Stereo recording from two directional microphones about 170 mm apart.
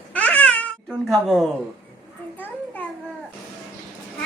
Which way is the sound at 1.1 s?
Centre (ahead or behind).